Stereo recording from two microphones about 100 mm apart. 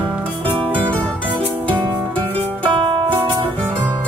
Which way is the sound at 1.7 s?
50° right (ahead or behind).